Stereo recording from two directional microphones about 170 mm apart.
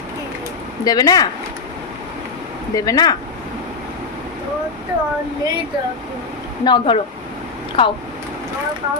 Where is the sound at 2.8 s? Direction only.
20° left (ahead or behind).